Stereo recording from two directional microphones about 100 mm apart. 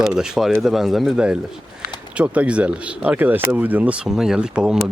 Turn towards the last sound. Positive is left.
turn(degrees=-10)  # may be behind; listen again after turning